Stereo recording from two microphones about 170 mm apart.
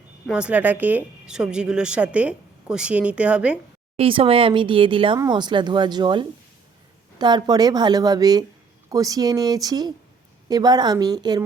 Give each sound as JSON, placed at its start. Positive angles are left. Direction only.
{"t": 0.3, "sound": "a woman's voice", "side_deg": -5}
{"t": 3.9, "sound": "speech", "side_deg": -35}